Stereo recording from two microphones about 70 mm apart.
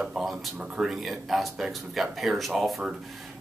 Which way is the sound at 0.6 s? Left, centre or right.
Centre.